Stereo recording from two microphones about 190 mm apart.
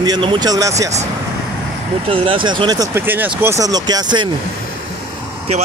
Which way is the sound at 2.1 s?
30° right (ahead or behind).